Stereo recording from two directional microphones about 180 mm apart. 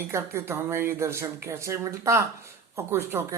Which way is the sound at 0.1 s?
15° right (ahead or behind).